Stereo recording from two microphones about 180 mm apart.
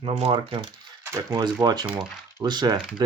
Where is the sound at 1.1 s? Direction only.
20° right (ahead or behind).